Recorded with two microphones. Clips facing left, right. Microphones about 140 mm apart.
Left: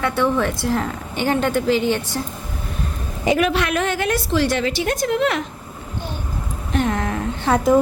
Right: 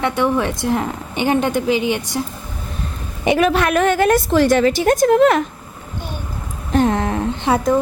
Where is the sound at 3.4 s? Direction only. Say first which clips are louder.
Right 4 dB; 45° right (ahead or behind).